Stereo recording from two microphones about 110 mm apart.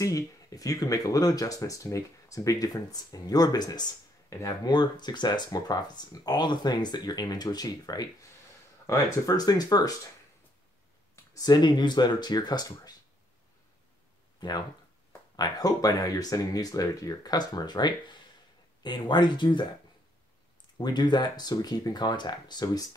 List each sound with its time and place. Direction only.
0.0 s speech: 30° left (ahead or behind)
4.6 s speech: 40° left (ahead or behind)
11.3 s speech: 40° left (ahead or behind)
14.4 s speech: 40° left (ahead or behind)
20.7 s speech: 40° left (ahead or behind)